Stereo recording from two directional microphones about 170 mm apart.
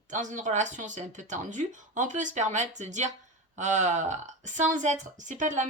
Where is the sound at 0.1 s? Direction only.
45° right (ahead or behind).